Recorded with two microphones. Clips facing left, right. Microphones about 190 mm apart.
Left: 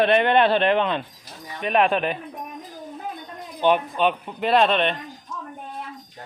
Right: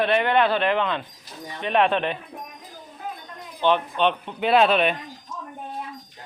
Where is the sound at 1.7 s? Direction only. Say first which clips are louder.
Left 1 dB; 5° left (ahead or behind).